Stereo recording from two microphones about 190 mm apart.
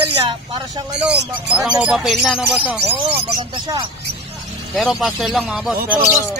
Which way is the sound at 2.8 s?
30° right (ahead or behind).